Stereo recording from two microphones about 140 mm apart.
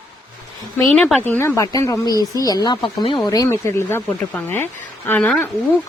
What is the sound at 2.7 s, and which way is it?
Speech, 40° left (ahead or behind).